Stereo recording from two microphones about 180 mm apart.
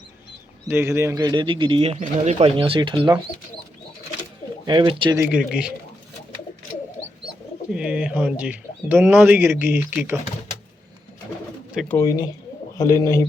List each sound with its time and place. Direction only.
0.7 s speech: 15° right (ahead or behind); by 3.2 s 30° right (ahead or behind)
4.6 s speech: 25° right (ahead or behind)
5.1 s speech: 10° right (ahead or behind)
7.7 s speech: 5° right (ahead or behind)
11.7 s speech: centre (ahead or behind)
11.9 s a man's voice: 20° left (ahead or behind)